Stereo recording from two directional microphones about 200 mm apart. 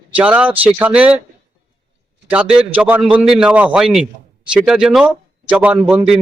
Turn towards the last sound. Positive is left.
turn(degrees=-5)  # may be behind; listen again after turning